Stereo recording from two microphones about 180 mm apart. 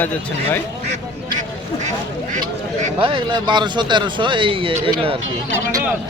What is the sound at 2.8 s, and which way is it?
Speech, 30° right (ahead or behind).